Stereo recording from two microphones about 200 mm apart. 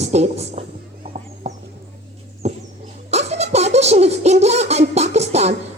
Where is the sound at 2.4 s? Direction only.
35° right (ahead or behind).